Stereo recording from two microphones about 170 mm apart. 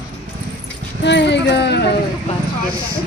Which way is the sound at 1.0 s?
90° left.